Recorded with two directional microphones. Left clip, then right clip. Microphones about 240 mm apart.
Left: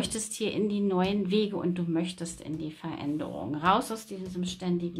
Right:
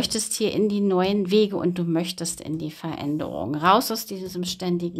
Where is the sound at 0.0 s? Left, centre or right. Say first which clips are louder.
Right 7 dB; right.